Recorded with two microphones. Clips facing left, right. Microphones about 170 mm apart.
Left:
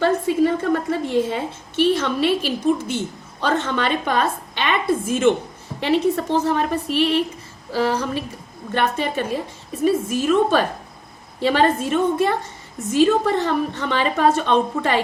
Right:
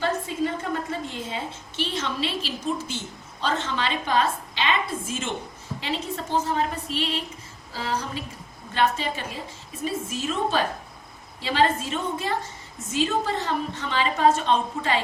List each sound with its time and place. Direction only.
0.6 s a woman's voice: 65° left (ahead or behind)
8.7 s a woman's voice: 55° left (ahead or behind)